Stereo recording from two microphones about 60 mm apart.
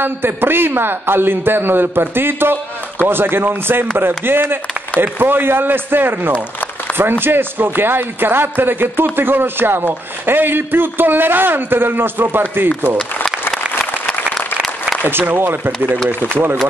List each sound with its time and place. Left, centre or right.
0.0 s a man's voice: right
14.3 s applause: centre
15.0 s a man's voice: right